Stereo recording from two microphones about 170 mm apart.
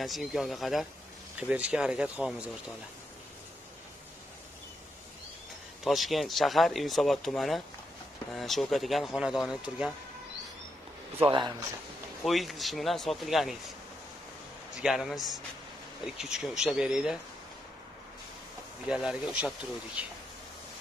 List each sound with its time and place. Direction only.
0.0 s speech: centre (ahead or behind)
5.9 s speech: centre (ahead or behind)
11.2 s speech: 30° right (ahead or behind)
12.3 s speech: centre (ahead or behind)
14.8 s speech: 5° right (ahead or behind)
18.9 s speech: 5° right (ahead or behind)